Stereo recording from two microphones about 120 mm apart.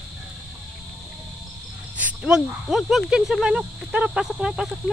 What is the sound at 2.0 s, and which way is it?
Speech, 10° right (ahead or behind).